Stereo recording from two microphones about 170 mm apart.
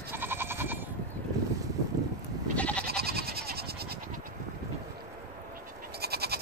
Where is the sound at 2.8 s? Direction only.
65° right (ahead or behind).